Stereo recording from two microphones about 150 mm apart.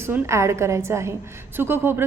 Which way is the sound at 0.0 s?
20° right (ahead or behind).